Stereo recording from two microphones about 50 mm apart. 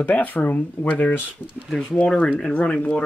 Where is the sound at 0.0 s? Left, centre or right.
Left.